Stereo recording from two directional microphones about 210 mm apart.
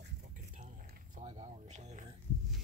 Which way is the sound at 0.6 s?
35° right (ahead or behind).